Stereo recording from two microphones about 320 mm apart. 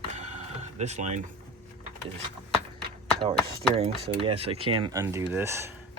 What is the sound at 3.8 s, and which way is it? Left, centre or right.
Speech, centre.